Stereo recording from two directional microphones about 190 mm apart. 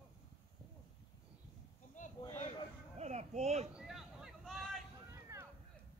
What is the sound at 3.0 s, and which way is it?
Speech, 35° right (ahead or behind).